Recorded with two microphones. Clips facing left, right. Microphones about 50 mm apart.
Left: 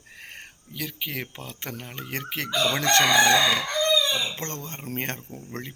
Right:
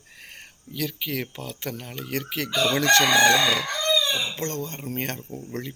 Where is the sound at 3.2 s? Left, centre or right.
Left.